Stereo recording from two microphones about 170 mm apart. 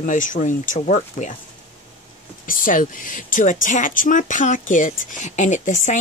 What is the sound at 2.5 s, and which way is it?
Speech, 55° left (ahead or behind).